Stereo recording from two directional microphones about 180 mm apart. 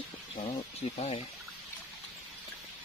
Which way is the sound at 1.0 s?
35° left (ahead or behind).